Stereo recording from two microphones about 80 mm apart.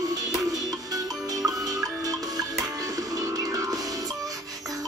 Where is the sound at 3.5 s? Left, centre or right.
Right.